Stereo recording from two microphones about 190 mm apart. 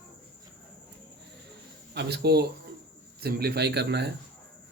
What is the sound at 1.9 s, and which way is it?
A man's voice, 60° right (ahead or behind).